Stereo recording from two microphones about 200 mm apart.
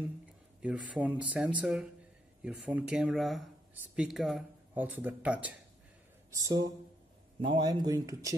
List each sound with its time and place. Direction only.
0.6 s speech: 5° right (ahead or behind)
6.3 s speech: 20° right (ahead or behind)